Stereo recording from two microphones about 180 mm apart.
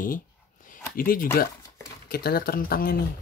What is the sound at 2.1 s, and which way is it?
Speech, 55° left (ahead or behind).